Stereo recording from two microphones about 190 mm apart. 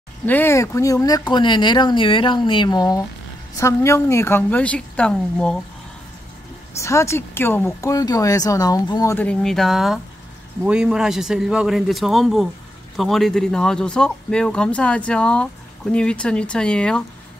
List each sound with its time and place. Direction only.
0.2 s speech: 10° left (ahead or behind)
6.8 s speech: 15° left (ahead or behind)